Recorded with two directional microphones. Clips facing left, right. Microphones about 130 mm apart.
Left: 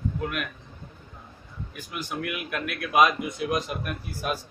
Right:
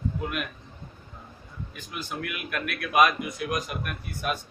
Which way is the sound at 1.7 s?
15° left (ahead or behind).